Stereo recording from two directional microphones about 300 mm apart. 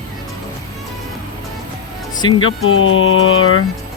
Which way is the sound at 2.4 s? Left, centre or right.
Left.